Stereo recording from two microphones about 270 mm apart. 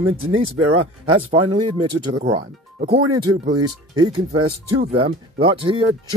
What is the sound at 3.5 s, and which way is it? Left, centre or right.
Speech, right.